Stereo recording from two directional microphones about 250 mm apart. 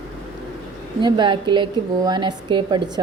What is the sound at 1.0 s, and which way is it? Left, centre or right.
A woman's voice, centre.